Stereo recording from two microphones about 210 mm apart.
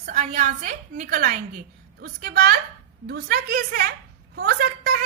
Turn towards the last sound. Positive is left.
turn(degrees=-45)  # may be behind; listen again after turning